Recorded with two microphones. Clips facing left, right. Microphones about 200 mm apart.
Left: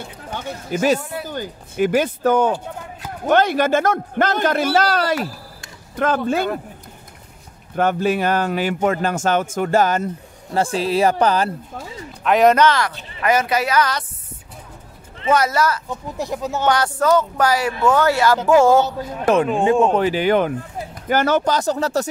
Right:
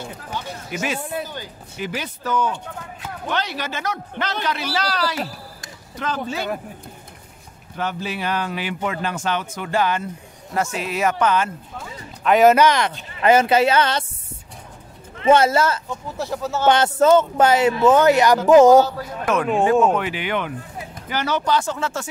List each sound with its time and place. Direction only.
0.7 s speech: 40° left (ahead or behind)
7.7 s speech: 50° left (ahead or behind)
10.5 s speech: 30° left (ahead or behind)
12.2 s speech: centre (ahead or behind); by 14.0 s 25° right (ahead or behind)
15.2 s speech: 25° right (ahead or behind)
15.9 s speech: 15° left (ahead or behind)
16.6 s speech: 25° right (ahead or behind)
19.2 s speech: 30° left (ahead or behind)